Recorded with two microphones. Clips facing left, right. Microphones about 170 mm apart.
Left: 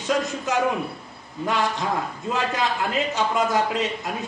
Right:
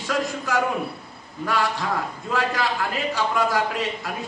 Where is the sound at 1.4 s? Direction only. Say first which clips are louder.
Left 1 dB; 20° left (ahead or behind).